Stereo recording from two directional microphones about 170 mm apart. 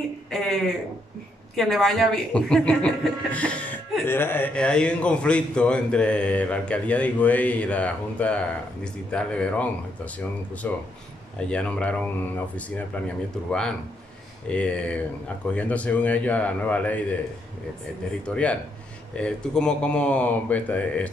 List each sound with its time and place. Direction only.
0.3 s a man's voice: centre (ahead or behind)
1.5 s a man's voice: centre (ahead or behind)
18.2 s speech: 5° left (ahead or behind)